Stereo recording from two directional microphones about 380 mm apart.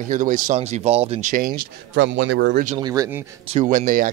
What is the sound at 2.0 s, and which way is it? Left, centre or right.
Speech, right.